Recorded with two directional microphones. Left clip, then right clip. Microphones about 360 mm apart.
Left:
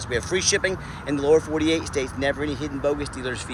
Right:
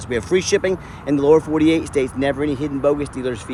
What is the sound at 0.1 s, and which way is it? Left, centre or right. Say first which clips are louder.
Speech: right 5 dB; centre.